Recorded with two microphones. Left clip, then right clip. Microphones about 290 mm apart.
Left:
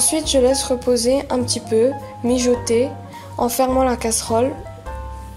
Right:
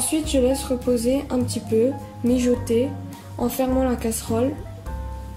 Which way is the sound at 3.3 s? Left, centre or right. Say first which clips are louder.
Left 6 dB; left.